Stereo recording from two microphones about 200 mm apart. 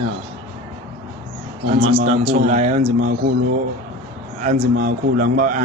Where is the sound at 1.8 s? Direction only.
25° right (ahead or behind).